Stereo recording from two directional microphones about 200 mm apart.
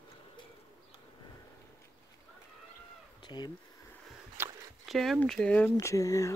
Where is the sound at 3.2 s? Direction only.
20° left (ahead or behind).